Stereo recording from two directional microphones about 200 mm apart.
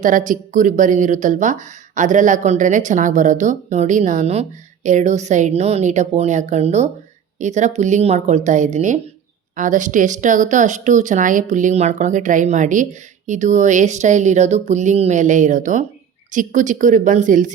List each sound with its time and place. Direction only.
0.0 s speech: 40° right (ahead or behind)